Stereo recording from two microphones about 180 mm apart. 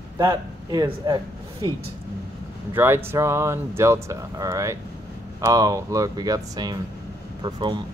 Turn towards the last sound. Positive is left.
turn(degrees=-25)  # may be behind; listen again after turning